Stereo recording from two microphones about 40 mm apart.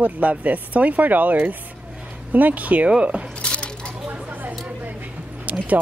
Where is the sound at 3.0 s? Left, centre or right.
Right.